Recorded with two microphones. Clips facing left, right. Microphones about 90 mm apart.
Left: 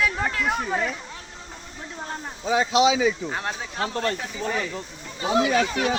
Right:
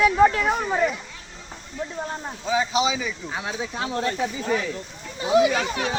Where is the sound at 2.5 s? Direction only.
80° left.